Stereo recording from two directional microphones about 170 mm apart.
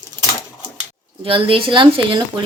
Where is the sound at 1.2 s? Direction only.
30° right (ahead or behind).